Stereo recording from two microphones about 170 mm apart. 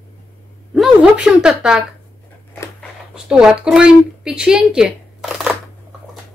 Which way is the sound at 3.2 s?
5° right (ahead or behind).